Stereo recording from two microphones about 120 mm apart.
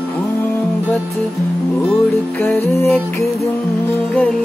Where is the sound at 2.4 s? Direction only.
15° left (ahead or behind).